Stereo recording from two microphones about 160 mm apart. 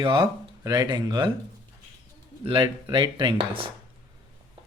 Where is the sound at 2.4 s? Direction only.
30° right (ahead or behind).